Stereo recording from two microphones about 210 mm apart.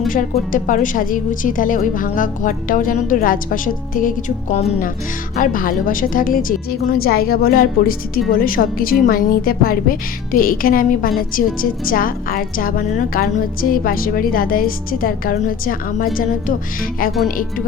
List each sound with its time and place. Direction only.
0.5 s a woman's voice: 40° left (ahead or behind)